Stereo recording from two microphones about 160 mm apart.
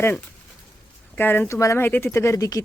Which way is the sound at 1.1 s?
15° left (ahead or behind).